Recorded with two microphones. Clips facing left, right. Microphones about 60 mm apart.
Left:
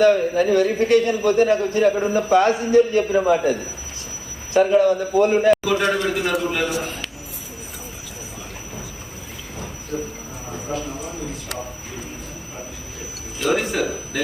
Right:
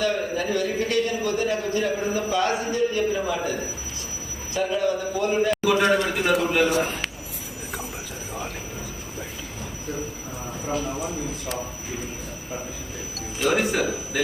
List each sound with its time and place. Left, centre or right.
0.0 s a man's voice: left
4.5 s a man's voice: left
5.6 s a man's voice: centre
6.7 s a man's voice: right
13.4 s a man's voice: centre